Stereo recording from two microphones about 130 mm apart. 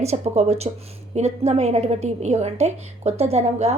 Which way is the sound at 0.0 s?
55° right (ahead or behind).